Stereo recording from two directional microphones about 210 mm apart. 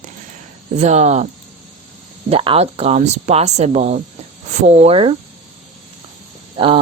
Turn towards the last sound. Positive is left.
turn(degrees=-25)  # may be behind; listen again after turning